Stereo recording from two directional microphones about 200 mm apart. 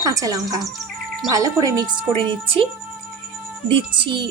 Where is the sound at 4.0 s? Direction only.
25° right (ahead or behind).